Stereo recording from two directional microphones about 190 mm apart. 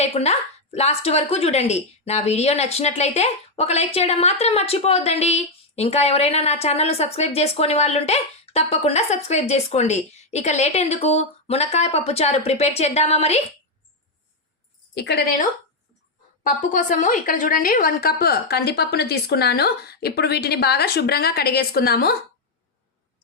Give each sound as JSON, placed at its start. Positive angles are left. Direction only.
{"t": 0.0, "sound": "speech", "side_deg": 35}
{"t": 14.9, "sound": "a woman's voice", "side_deg": 60}
{"t": 16.4, "sound": "a woman's voice", "side_deg": 45}